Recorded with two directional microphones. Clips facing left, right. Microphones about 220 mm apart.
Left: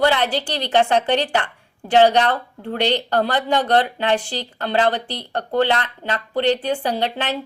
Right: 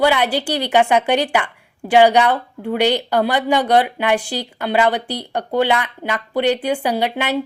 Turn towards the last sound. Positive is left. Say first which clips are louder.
# right 3 dB
turn(degrees=-10)  # may be behind; listen again after turning